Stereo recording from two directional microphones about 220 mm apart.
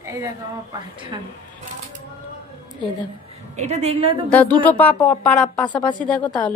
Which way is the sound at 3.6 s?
30° right (ahead or behind).